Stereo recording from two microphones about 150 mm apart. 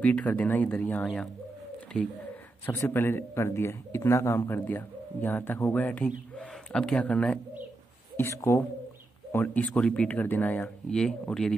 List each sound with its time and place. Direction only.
0.0 s speech: 10° left (ahead or behind)
2.6 s a man's voice: 15° left (ahead or behind)
8.2 s speech: 20° left (ahead or behind)